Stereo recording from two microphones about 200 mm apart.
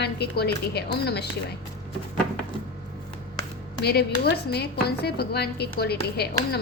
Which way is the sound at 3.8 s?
55° left (ahead or behind).